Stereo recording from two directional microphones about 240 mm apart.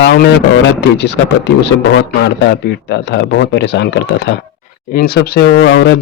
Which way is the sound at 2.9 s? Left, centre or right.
Left.